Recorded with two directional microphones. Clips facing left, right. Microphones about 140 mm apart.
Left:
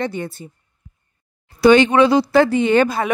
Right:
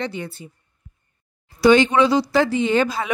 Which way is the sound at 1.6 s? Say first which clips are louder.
Left 3 dB; 60° left (ahead or behind).